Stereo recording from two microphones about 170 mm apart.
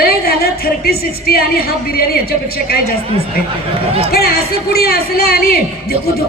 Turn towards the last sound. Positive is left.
turn(degrees=65)  # may be behind; listen again after turning